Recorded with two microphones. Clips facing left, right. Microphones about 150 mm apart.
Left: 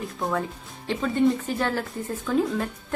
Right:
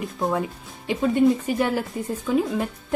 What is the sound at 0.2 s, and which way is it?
Speech, 20° right (ahead or behind).